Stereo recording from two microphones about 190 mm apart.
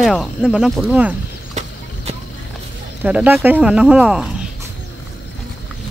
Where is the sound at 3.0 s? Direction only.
10° right (ahead or behind).